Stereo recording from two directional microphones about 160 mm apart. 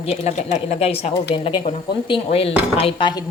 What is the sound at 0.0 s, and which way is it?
Speech, 40° left (ahead or behind).